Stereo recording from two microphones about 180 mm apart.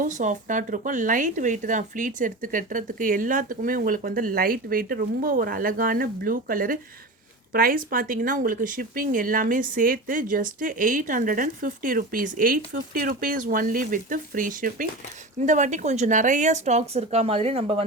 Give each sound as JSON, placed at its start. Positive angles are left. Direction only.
{"t": 0.0, "sound": "speech", "side_deg": -45}